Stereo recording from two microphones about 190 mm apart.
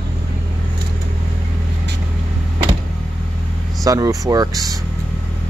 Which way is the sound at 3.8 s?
15° right (ahead or behind).